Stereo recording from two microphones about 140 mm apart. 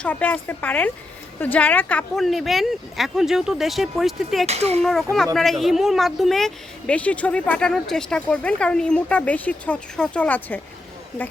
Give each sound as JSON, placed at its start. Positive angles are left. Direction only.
{"t": 0.0, "sound": "a woman's voice", "side_deg": 10}
{"t": 4.4, "sound": "speech", "side_deg": -50}
{"t": 4.8, "sound": "a woman's voice", "side_deg": 5}